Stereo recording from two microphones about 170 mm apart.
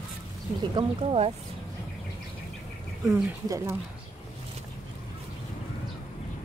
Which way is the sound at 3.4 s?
15° right (ahead or behind).